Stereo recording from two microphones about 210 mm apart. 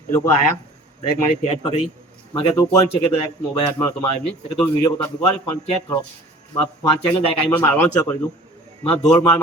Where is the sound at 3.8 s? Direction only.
15° left (ahead or behind).